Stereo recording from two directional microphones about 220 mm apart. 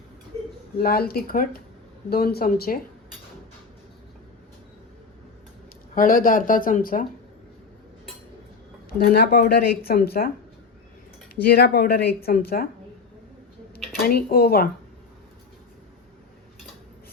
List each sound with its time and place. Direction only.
0.8 s speech: 45° left (ahead or behind)
5.9 s speech: 40° left (ahead or behind)
9.1 s speech: 50° left (ahead or behind)
11.6 s speech: 45° left (ahead or behind)
14.0 s speech: 45° left (ahead or behind)